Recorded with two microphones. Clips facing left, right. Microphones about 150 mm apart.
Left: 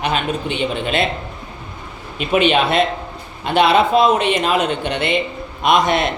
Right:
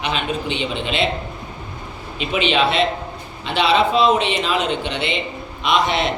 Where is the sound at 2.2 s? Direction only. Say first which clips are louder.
Left 3 dB; 50° left (ahead or behind).